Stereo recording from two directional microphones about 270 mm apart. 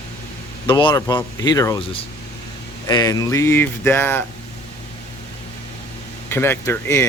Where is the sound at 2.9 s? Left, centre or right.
Centre.